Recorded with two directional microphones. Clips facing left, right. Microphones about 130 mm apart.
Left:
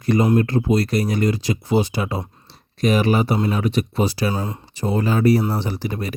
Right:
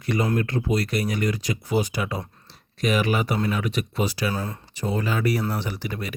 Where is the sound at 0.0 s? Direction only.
40° left (ahead or behind).